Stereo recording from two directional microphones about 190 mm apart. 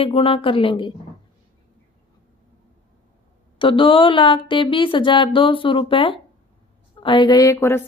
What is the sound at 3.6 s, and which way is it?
A woman's voice, 25° left (ahead or behind).